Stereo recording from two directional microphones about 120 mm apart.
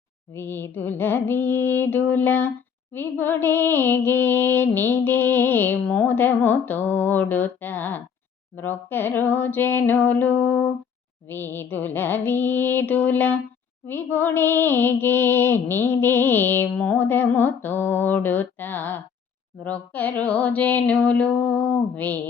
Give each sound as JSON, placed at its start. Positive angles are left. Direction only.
{"t": 0.3, "sound": "mantra", "side_deg": 20}